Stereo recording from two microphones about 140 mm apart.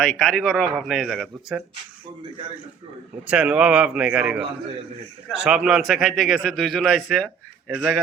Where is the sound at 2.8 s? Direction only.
40° right (ahead or behind).